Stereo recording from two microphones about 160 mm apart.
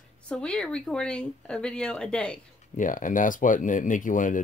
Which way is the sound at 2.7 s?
55° left (ahead or behind).